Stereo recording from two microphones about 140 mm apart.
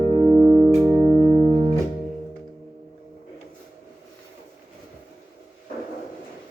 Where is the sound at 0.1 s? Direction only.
30° right (ahead or behind).